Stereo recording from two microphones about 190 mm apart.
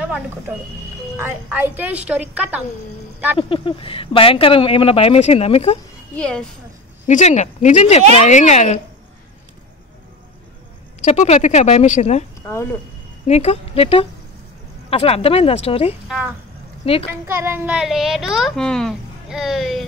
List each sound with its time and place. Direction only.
1.1 s speech: 10° right (ahead or behind)
3.3 s speech: 25° left (ahead or behind)
6.1 s a child's voice: 5° left (ahead or behind)
7.1 s speech: 40° left (ahead or behind)
11.0 s speech: 40° left (ahead or behind)
12.4 s speech: 15° left (ahead or behind)
13.3 s speech: 35° left (ahead or behind)
17.3 s a child's voice: 15° right (ahead or behind)